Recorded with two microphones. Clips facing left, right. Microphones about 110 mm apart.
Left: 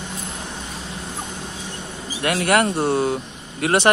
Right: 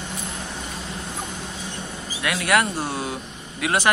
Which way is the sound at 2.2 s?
40° left (ahead or behind).